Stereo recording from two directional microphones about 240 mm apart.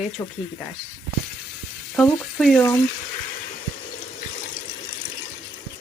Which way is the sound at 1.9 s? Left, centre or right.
Centre.